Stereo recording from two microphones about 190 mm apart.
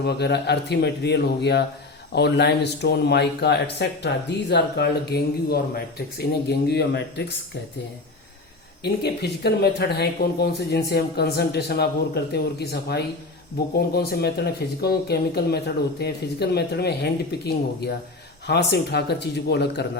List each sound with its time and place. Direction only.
0.0 s speech: 60° left (ahead or behind)
8.8 s speech: 60° left (ahead or behind)